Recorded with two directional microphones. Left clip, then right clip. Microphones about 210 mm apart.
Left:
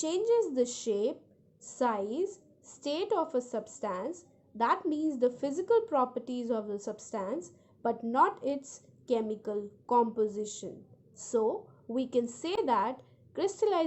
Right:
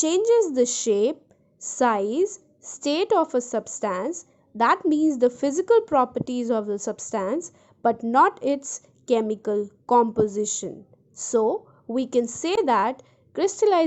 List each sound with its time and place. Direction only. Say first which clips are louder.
0.0 s a woman's voice: right 9 dB; 35° right (ahead or behind)